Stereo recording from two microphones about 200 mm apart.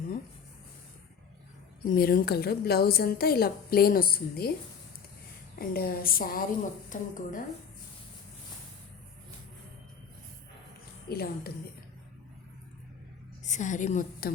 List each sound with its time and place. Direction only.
1.8 s a woman's voice: 50° left (ahead or behind)
5.5 s a woman's voice: 50° left (ahead or behind)
11.1 s a woman's voice: 50° left (ahead or behind)
13.4 s a woman's voice: 35° left (ahead or behind)